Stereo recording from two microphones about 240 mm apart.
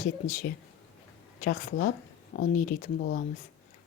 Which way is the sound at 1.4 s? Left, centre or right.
Left.